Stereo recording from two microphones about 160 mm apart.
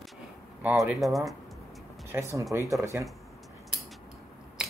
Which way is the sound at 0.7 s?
Centre (ahead or behind).